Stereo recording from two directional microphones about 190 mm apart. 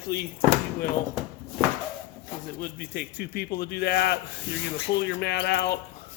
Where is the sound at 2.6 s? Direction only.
55° left (ahead or behind).